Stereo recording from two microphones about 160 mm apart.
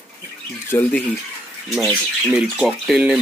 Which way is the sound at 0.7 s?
10° left (ahead or behind).